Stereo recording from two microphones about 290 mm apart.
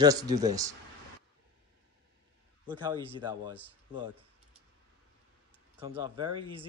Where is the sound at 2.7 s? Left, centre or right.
Centre.